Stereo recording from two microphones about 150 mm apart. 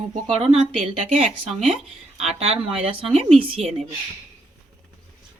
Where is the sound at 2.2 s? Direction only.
45° right (ahead or behind).